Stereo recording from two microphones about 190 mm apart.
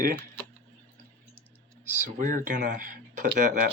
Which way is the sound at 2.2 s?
45° right (ahead or behind).